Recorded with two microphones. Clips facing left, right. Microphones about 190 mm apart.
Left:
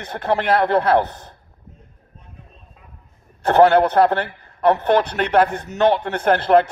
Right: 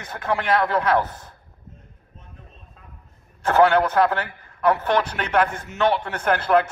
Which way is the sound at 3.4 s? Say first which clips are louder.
Left 4 dB; 35° left (ahead or behind).